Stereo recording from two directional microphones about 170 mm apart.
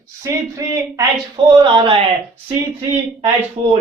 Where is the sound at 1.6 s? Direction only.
30° right (ahead or behind).